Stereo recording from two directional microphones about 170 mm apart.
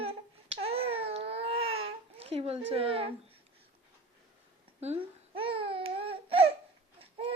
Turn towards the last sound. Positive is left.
turn(degrees=-35)  # may be behind; listen again after turning